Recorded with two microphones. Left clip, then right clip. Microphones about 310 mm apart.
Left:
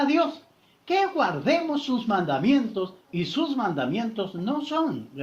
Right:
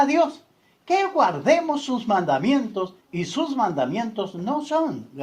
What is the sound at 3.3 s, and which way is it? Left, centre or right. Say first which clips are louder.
Speech: right 4 dB; right.